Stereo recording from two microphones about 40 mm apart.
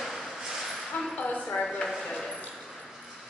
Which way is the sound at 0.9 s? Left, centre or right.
Left.